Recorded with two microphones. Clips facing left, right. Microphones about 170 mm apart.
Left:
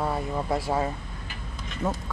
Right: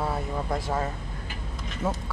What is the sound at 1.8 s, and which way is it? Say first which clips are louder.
Speech: even; 5° right (ahead or behind).